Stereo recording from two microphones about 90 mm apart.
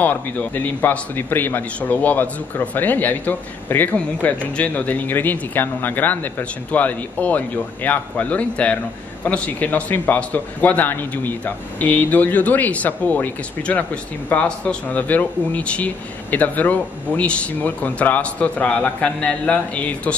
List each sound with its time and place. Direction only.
0.0 s a man's voice: 20° left (ahead or behind)